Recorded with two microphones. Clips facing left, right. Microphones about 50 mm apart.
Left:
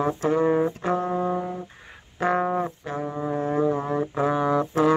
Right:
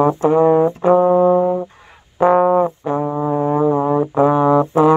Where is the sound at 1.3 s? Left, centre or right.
Right.